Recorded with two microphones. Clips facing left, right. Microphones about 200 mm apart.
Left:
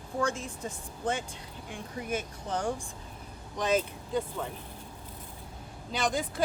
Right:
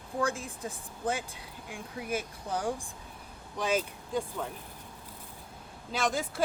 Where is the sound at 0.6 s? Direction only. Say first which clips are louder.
Left 1 dB; 15° right (ahead or behind).